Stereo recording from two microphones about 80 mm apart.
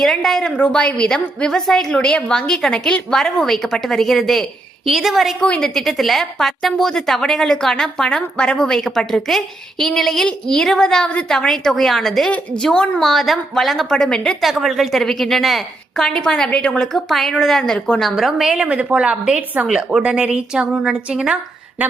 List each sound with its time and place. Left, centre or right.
0.0 s a woman's voice: centre
5.4 s a woman's voice: centre
14.4 s a woman's voice: centre
18.1 s a woman's voice: centre